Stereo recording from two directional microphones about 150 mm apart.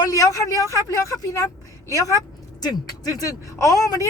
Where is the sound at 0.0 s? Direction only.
20° left (ahead or behind).